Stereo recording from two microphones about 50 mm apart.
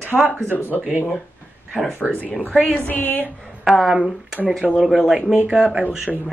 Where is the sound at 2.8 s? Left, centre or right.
Left.